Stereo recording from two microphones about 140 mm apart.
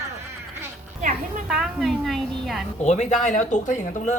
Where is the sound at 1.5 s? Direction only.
Centre (ahead or behind).